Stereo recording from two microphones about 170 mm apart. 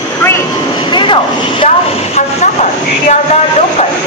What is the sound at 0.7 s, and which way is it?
Speech, 25° left (ahead or behind).